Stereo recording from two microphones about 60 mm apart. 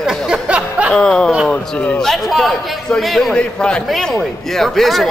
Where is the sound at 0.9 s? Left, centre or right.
Centre.